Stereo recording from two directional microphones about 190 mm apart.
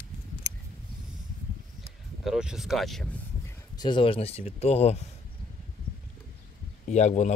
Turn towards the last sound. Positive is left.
turn(degrees=35)  # may be behind; listen again after turning